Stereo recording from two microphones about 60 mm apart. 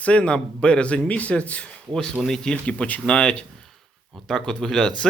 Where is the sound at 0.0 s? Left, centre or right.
Left.